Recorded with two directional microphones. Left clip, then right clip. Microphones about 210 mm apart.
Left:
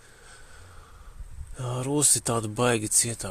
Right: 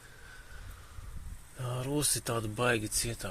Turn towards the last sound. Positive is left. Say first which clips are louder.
# left 7 dB
turn(degrees=35)  # may be behind; listen again after turning